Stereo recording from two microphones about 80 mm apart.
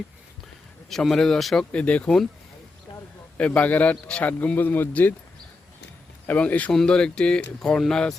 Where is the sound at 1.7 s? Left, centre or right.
Centre.